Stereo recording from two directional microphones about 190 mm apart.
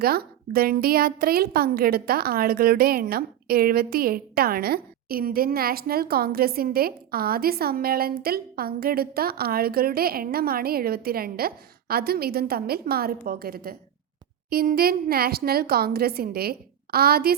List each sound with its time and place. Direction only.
0.0 s speech: 55° right (ahead or behind)